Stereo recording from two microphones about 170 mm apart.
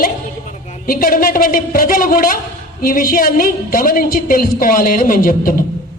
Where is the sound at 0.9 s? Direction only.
55° left (ahead or behind).